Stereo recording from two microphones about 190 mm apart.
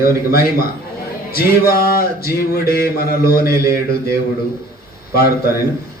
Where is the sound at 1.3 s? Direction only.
50° left (ahead or behind).